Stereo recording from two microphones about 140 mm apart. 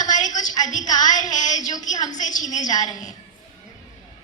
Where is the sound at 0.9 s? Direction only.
30° left (ahead or behind).